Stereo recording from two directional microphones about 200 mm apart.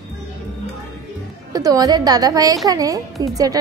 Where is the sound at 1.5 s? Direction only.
20° right (ahead or behind).